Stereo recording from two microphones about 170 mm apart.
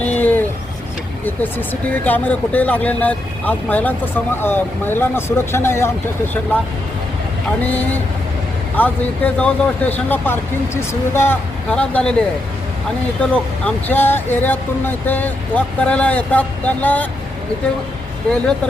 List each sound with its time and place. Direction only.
0.0 s a sound: 10° left (ahead or behind)
1.2 s speech: 10° left (ahead or behind)
8.7 s speech: 10° left (ahead or behind)
13.3 s speech: 10° left (ahead or behind)